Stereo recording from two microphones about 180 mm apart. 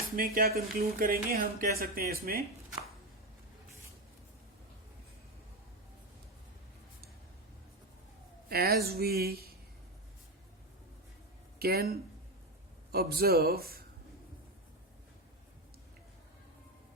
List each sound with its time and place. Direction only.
0.2 s speech: 55° right (ahead or behind)
8.4 s speech: 60° right (ahead or behind)
11.6 s speech: 60° right (ahead or behind)